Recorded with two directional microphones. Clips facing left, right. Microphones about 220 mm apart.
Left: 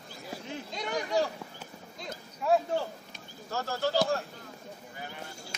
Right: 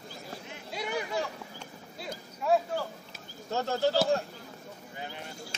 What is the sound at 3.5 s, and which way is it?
Speech, 20° right (ahead or behind).